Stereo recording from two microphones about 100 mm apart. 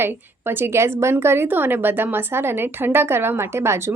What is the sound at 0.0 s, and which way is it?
A woman's voice, 20° right (ahead or behind).